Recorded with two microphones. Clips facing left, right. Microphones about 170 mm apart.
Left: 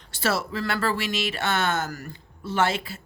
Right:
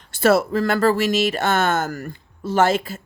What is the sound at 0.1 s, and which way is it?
Speech, 50° right (ahead or behind).